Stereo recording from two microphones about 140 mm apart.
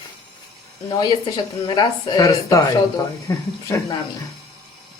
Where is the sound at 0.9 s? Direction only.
30° left (ahead or behind).